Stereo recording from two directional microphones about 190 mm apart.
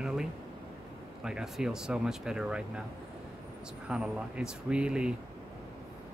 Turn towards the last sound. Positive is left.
turn(degrees=-5)  # may be behind; listen again after turning